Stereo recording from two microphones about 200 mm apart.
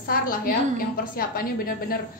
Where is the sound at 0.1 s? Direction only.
45° left (ahead or behind).